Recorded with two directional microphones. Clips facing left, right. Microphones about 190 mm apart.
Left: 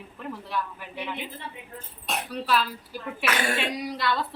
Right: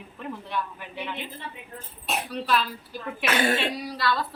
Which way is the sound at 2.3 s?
5° left (ahead or behind).